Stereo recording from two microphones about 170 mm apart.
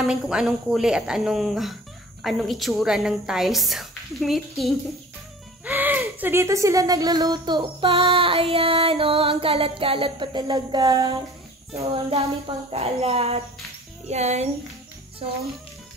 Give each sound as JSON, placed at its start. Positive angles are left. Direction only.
{"t": 0.0, "sound": "a woman's voice", "side_deg": -5}
{"t": 5.7, "sound": "speech", "side_deg": -10}
{"t": 11.7, "sound": "a sound", "side_deg": -35}